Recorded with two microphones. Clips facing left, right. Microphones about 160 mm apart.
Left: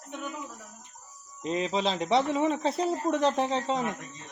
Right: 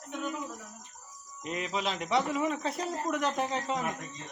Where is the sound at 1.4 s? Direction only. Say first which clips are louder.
Left 5 dB; 30° left (ahead or behind).